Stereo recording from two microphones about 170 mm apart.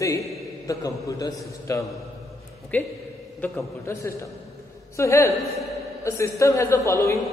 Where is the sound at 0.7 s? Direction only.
20° left (ahead or behind).